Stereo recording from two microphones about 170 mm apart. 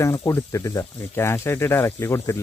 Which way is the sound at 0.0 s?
15° left (ahead or behind).